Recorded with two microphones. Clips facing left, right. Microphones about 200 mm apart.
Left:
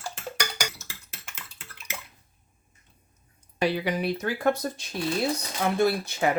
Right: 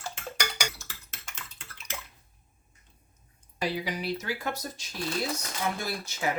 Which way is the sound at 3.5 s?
65° left (ahead or behind).